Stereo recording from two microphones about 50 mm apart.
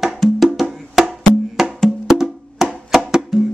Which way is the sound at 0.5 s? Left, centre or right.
Centre.